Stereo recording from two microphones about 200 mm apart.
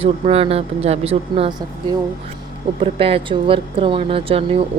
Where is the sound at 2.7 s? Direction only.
30° right (ahead or behind).